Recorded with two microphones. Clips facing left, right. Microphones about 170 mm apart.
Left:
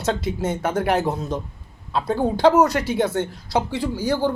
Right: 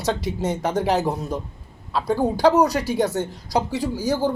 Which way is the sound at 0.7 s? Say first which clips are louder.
Even; 15° right (ahead or behind).